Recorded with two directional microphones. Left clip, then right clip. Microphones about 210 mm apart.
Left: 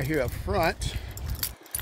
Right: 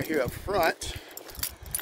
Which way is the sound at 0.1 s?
10° right (ahead or behind).